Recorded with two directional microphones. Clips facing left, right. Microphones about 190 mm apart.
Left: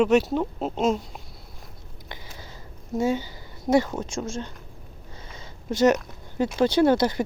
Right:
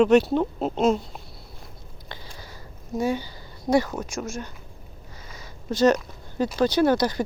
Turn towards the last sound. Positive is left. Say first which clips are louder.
# left 1 dB
turn(degrees=25)  # may be behind; listen again after turning